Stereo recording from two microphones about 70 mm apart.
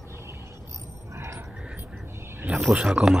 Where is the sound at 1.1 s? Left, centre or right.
Right.